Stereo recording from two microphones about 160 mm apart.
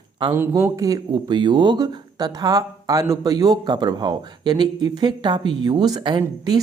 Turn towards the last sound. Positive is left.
turn(degrees=-25)  # may be behind; listen again after turning